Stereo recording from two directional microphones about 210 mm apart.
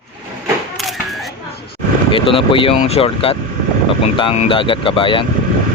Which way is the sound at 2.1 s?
25° left (ahead or behind).